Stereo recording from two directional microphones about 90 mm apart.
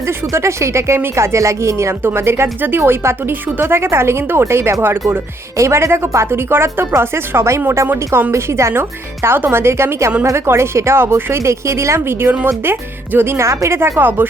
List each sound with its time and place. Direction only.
0.3 s speech: 30° right (ahead or behind)
7.9 s speech: 20° right (ahead or behind)
8.3 s speech: 30° right (ahead or behind)